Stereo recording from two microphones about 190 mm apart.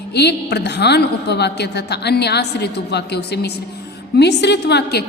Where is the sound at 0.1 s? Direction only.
60° left (ahead or behind).